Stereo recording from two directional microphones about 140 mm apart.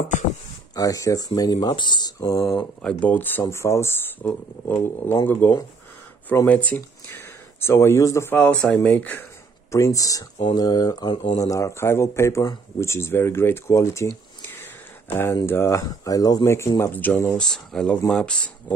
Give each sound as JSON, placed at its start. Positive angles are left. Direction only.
{"t": 0.7, "sound": "speech", "side_deg": 25}
{"t": 2.8, "sound": "speech", "side_deg": 10}
{"t": 8.4, "sound": "speech", "side_deg": 10}
{"t": 9.7, "sound": "speech", "side_deg": 20}